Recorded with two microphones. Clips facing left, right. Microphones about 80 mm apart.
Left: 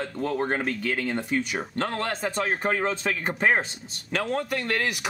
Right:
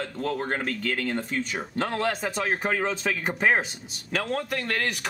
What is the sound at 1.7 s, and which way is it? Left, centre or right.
Speech, centre.